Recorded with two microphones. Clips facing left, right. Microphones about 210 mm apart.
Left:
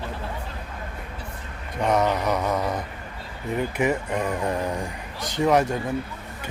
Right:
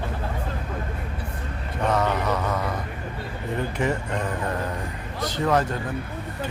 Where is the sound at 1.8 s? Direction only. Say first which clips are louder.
Left 2 dB; 15° left (ahead or behind).